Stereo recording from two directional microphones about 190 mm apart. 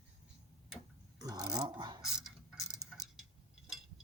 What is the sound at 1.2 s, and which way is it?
Mechanisms, 20° right (ahead or behind).